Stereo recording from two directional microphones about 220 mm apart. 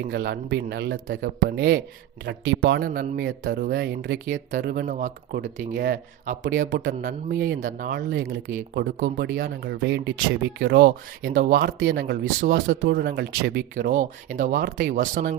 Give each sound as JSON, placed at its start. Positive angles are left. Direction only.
{"t": 0.1, "sound": "speech", "side_deg": -50}
{"t": 6.7, "sound": "speech", "side_deg": -50}
{"t": 13.7, "sound": "speech", "side_deg": -35}